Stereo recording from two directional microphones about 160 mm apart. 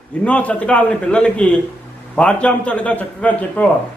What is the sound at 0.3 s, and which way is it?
A man's voice, 10° left (ahead or behind).